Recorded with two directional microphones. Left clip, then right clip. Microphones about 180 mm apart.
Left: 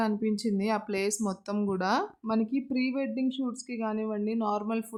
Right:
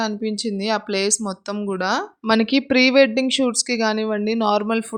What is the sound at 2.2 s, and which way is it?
Speech, 45° right (ahead or behind).